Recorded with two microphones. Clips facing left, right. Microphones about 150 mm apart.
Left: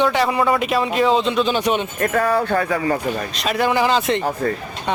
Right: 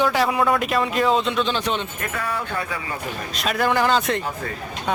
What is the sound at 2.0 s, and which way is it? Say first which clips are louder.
Speech: left 9 dB; 40° left (ahead or behind).